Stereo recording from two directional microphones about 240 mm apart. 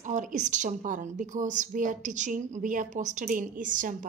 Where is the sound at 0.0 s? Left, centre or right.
Right.